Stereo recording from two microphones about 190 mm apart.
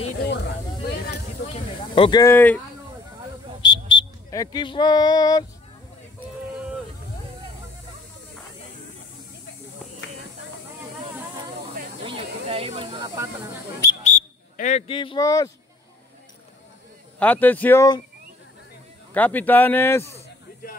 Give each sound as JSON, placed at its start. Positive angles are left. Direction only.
{"t": 0.2, "sound": "a sound", "side_deg": 60}
{"t": 2.0, "sound": "speech", "side_deg": 25}
{"t": 2.3, "sound": "speech", "side_deg": 10}
{"t": 3.6, "sound": "a sound", "side_deg": 20}
{"t": 12.0, "sound": "snake", "side_deg": -30}
{"t": 14.0, "sound": "speech", "side_deg": 40}
{"t": 17.2, "sound": "speech", "side_deg": 10}
{"t": 19.1, "sound": "speech", "side_deg": 10}